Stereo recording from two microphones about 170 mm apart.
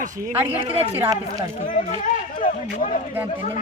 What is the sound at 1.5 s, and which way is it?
Speech, 50° left (ahead or behind).